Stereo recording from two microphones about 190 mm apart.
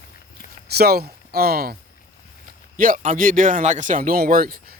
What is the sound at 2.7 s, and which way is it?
Speech, 45° right (ahead or behind).